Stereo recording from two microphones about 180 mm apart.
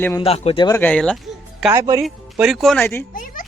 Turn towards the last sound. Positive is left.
turn(degrees=50)  # may be behind; listen again after turning